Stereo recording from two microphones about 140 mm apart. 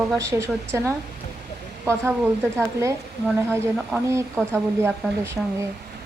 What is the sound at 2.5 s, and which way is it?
Speech, 20° right (ahead or behind).